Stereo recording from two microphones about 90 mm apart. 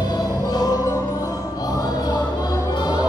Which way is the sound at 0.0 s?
50° left (ahead or behind).